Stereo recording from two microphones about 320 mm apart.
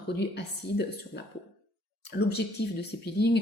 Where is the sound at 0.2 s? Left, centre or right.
Left.